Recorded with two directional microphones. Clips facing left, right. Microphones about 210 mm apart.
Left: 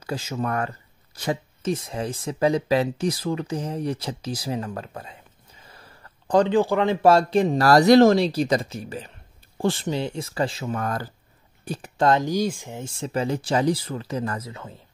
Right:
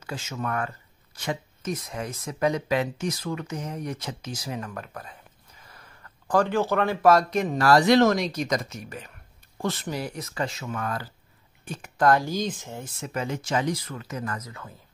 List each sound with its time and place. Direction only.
0.0 s speech: 35° left (ahead or behind)
5.7 s a sound: 30° left (ahead or behind)
7.0 s speech: 30° left (ahead or behind)
12.1 s speech: 20° left (ahead or behind)
12.8 s speech: 30° left (ahead or behind)